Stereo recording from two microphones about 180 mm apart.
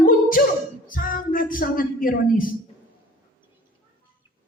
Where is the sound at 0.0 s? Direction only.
50° left (ahead or behind).